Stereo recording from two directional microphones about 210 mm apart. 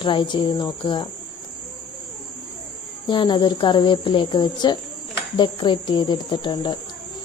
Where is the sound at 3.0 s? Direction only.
20° left (ahead or behind).